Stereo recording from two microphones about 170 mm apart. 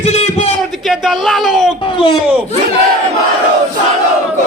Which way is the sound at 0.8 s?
Centre (ahead or behind).